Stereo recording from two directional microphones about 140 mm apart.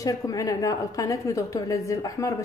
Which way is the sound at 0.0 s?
25° left (ahead or behind).